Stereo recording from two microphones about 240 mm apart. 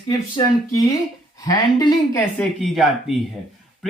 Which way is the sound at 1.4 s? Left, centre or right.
Centre.